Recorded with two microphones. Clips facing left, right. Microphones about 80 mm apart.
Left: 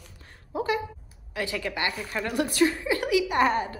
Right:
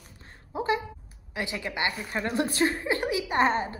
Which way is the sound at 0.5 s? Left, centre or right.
Right.